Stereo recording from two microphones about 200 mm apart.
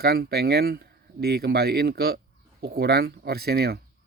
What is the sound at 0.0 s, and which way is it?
Speech, 50° right (ahead or behind).